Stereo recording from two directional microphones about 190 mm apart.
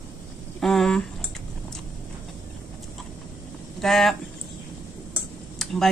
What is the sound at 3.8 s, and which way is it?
Speech, centre (ahead or behind).